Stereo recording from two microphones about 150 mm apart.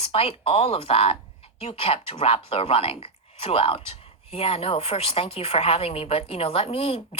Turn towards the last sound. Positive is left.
turn(degrees=40)  # may be behind; listen again after turning